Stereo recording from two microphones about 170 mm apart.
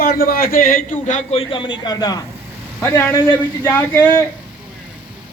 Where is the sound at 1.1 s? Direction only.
45° left (ahead or behind).